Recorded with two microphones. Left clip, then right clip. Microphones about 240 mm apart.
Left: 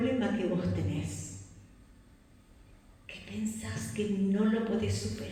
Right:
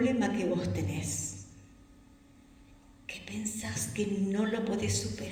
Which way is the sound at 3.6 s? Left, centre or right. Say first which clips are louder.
Right 3 dB; right.